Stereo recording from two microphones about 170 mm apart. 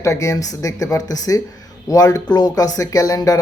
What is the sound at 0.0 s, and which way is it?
Speech, 20° left (ahead or behind).